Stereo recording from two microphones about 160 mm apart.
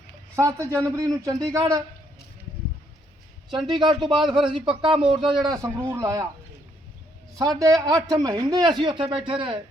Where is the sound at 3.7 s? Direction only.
30° right (ahead or behind).